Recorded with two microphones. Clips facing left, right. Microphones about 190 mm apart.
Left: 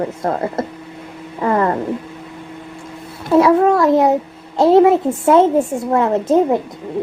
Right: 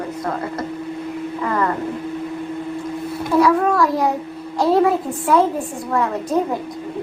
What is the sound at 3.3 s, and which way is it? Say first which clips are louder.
A woman's voice: left 4 dB; 25° left (ahead or behind).